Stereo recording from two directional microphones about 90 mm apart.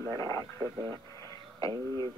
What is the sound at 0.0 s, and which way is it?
Speech, 35° left (ahead or behind).